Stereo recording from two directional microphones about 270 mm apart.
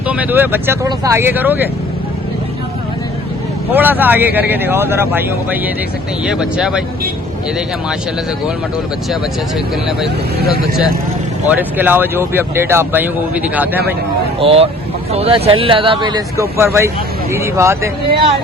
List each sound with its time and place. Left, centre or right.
0.1 s speech: centre
3.7 s speech: centre
10.4 s speech: left
11.4 s speech: centre
14.3 s speech: right